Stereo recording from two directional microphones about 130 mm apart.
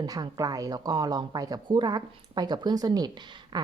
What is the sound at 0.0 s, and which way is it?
Speech, 30° right (ahead or behind).